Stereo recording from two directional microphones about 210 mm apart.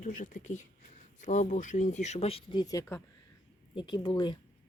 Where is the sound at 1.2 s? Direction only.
35° left (ahead or behind).